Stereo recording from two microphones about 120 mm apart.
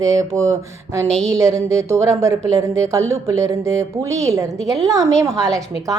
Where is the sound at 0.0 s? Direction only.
30° right (ahead or behind).